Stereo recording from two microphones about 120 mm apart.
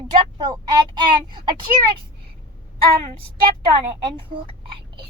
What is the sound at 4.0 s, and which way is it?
A child's voice, 40° right (ahead or behind).